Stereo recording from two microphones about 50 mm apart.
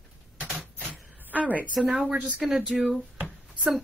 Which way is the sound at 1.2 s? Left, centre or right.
Right.